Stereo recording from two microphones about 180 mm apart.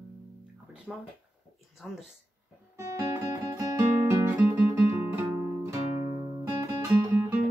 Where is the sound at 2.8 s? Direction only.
15° right (ahead or behind).